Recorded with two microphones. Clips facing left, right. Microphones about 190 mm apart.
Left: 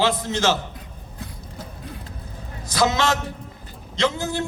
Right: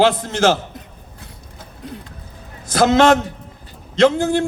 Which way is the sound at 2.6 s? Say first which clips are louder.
Right 8 dB; 55° right (ahead or behind).